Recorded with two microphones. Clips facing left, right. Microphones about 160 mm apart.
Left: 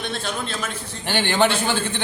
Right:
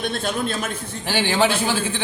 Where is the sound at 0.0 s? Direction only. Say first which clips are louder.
Right 4 dB; 50° right (ahead or behind).